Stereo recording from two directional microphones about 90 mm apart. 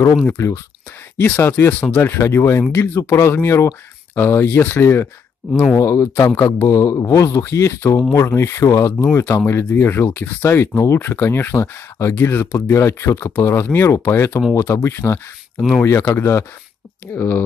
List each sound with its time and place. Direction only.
0.3 s speech: 30° left (ahead or behind)